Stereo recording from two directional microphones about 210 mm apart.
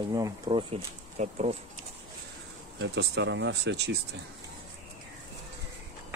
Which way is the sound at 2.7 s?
55° right (ahead or behind).